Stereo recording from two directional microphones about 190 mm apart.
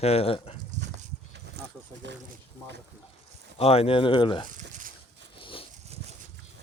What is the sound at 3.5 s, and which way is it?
Speech, 30° left (ahead or behind).